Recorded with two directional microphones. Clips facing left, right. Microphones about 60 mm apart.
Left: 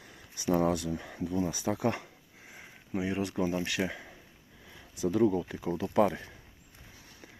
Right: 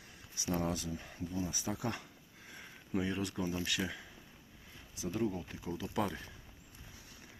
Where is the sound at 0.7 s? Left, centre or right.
Left.